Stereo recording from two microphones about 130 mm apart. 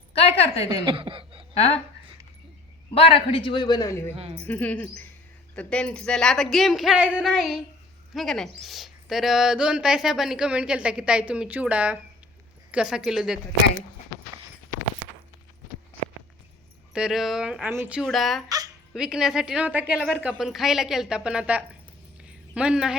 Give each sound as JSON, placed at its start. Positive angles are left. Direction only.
{"t": 0.1, "sound": "a sound", "side_deg": 50}
{"t": 0.9, "sound": "a sound", "side_deg": -40}
{"t": 1.5, "sound": "a woman's voice", "side_deg": 50}
{"t": 2.9, "sound": "a man's voice", "side_deg": 45}
{"t": 4.1, "sound": "speech", "side_deg": -50}
{"t": 4.4, "sound": "a woman's voice", "side_deg": 10}
{"t": 16.9, "sound": "a woman's voice", "side_deg": -5}
{"t": 18.0, "sound": "a woman's voice", "side_deg": 0}
{"t": 18.4, "sound": "dog", "side_deg": -30}
{"t": 18.9, "sound": "a woman's voice", "side_deg": -5}
{"t": 22.2, "sound": "a sound", "side_deg": -10}